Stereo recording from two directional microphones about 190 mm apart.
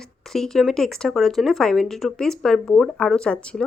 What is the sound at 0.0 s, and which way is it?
Speech, centre (ahead or behind).